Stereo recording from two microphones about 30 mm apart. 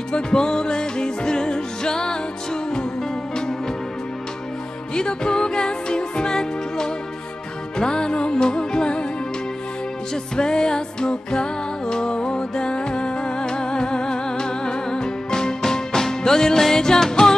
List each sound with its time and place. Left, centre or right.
0.1 s music: left
4.9 s music: left
10.3 s music: left